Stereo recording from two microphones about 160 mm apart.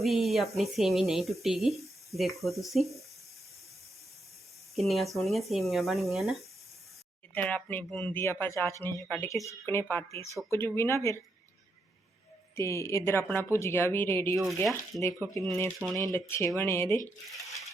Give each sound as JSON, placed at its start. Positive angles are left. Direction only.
{"t": 0.0, "sound": "a sound", "side_deg": 0}
{"t": 0.5, "sound": "speech", "side_deg": 0}
{"t": 4.7, "sound": "speech", "side_deg": 0}
{"t": 7.3, "sound": "a woman's voice", "side_deg": 10}
{"t": 9.3, "sound": "a woman's voice", "side_deg": 20}
{"t": 12.5, "sound": "a woman's voice", "side_deg": 15}
{"t": 14.3, "sound": "speech", "side_deg": 0}
{"t": 15.0, "sound": "speech", "side_deg": 20}
{"t": 15.8, "sound": "speech", "side_deg": -25}
{"t": 16.1, "sound": "a woman's voice", "side_deg": 15}